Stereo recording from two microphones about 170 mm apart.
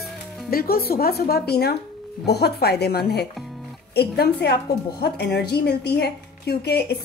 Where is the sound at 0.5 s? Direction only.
60° left (ahead or behind).